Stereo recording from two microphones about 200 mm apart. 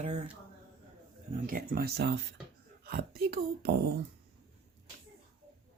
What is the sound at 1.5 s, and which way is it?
Speech, 45° right (ahead or behind).